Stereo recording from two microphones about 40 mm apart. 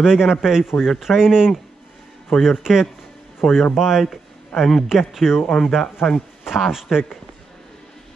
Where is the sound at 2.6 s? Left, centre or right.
Centre.